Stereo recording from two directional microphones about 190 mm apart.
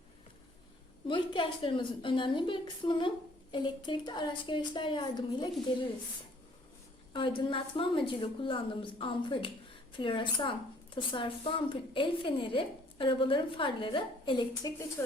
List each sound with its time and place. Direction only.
1.0 s a woman's voice: 25° left (ahead or behind)
7.1 s a woman's voice: 25° left (ahead or behind)